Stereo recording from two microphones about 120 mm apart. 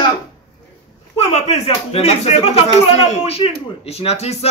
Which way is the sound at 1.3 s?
60° left (ahead or behind).